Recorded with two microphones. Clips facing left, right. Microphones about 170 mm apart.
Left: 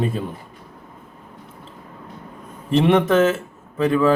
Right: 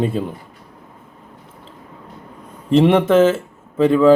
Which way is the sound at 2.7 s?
30° right (ahead or behind).